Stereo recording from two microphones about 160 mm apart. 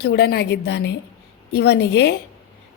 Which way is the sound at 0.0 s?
90° left.